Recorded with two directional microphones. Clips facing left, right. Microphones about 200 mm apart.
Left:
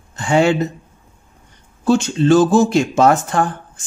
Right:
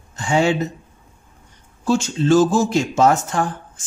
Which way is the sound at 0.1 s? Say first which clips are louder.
Left 3 dB; 60° left (ahead or behind).